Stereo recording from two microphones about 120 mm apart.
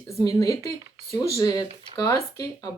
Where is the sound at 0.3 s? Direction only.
30° left (ahead or behind).